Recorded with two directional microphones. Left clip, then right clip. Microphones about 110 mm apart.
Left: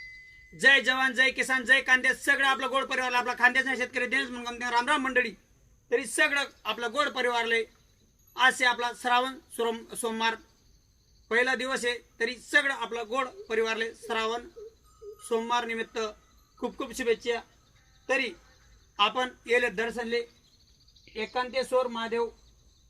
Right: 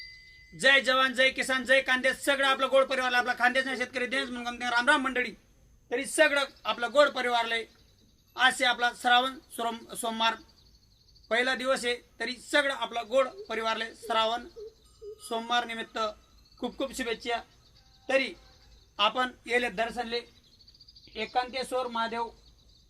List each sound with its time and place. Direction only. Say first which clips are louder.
0.5 s speech: left 1 dB; 30° right (ahead or behind)